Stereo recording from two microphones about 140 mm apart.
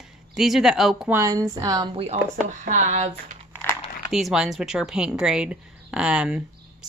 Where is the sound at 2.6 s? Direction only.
60° right (ahead or behind).